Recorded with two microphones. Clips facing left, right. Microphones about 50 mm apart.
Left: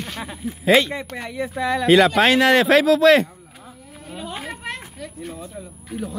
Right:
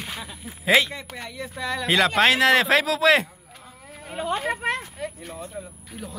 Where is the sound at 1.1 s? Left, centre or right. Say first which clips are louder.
Left 8 dB; centre.